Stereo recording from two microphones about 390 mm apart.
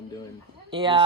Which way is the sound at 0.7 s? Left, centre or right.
Centre.